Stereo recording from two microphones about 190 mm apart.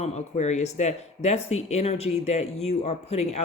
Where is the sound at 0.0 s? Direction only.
35° left (ahead or behind).